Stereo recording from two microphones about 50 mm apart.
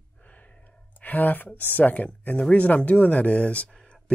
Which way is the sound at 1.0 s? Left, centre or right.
Left.